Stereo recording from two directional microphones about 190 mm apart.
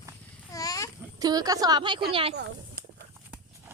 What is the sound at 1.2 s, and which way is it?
A woman's voice, 20° right (ahead or behind).